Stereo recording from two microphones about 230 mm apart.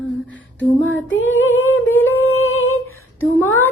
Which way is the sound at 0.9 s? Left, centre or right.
Left.